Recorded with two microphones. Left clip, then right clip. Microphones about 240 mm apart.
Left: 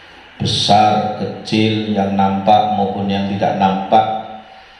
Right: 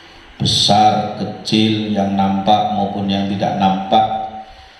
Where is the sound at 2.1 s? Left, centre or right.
Right.